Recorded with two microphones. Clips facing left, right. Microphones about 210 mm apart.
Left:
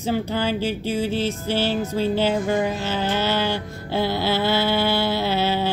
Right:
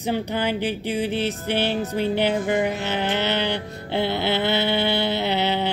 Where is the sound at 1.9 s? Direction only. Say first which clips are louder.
Left 1 dB; 15° right (ahead or behind).